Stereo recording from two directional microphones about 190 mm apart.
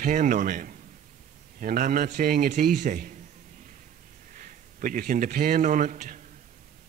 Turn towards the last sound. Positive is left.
turn(degrees=-40)  # may be behind; listen again after turning